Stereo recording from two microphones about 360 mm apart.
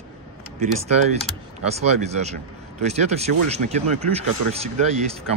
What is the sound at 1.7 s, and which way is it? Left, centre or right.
A man's voice, centre.